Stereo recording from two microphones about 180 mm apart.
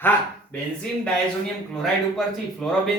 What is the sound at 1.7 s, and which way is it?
A man's voice, 5° left (ahead or behind).